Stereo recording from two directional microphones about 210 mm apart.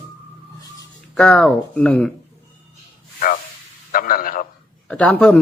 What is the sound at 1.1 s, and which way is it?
Speech, 5° left (ahead or behind).